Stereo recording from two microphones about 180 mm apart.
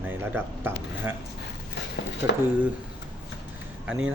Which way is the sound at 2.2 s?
15° right (ahead or behind).